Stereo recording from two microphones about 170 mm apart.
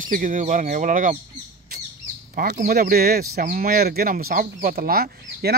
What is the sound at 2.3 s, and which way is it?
Speech, 50° right (ahead or behind).